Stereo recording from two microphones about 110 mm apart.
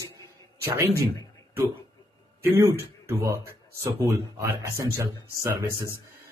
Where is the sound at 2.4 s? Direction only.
20° right (ahead or behind).